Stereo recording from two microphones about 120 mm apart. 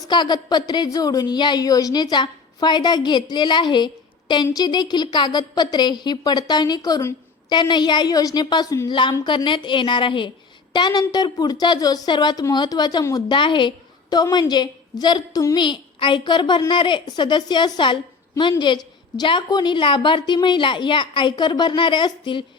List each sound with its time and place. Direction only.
0.1 s a woman's voice: 35° left (ahead or behind)
8.9 s a woman's voice: 40° left (ahead or behind)